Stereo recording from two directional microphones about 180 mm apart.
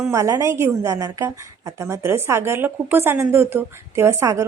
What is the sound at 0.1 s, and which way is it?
A woman's voice, 15° right (ahead or behind).